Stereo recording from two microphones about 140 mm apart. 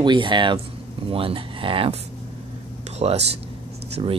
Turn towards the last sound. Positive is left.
turn(degrees=-40)  # may be behind; listen again after turning